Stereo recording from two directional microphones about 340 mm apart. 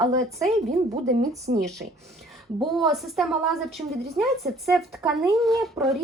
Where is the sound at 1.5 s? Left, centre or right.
Right.